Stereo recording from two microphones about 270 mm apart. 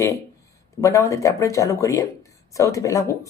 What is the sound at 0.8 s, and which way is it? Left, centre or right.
Speech, centre.